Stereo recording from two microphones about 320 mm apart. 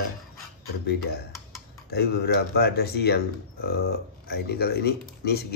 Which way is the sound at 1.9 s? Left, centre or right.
Left.